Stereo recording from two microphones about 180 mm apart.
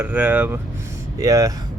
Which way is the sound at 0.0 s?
10° right (ahead or behind).